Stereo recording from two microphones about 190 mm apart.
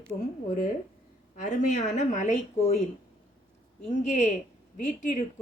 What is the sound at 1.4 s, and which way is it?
Speech, 40° left (ahead or behind).